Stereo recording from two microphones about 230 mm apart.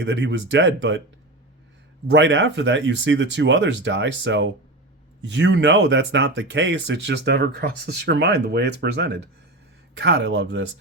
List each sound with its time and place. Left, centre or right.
0.0 s speech: right
2.0 s speech: right